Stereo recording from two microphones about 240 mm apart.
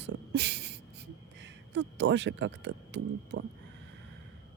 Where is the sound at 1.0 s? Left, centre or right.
Right.